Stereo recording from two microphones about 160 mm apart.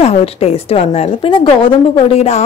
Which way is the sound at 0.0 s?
40° left (ahead or behind).